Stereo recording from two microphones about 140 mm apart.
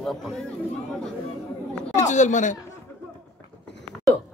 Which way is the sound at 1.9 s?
60° left (ahead or behind).